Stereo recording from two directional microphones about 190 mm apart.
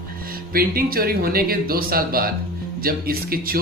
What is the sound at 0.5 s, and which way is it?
Speech, 50° right (ahead or behind).